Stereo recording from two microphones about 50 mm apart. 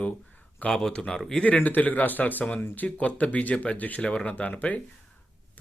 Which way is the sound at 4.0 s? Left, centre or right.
Centre.